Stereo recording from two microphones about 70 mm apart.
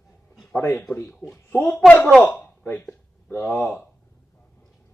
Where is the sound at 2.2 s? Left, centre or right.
Left.